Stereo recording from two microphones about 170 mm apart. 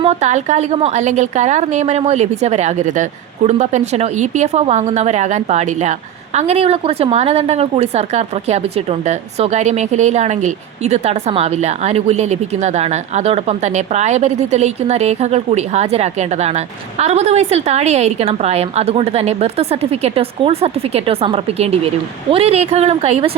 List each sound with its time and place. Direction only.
0.0 s a woman's voice: 40° right (ahead or behind)